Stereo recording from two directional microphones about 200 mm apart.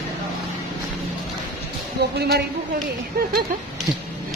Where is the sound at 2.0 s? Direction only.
55° right (ahead or behind).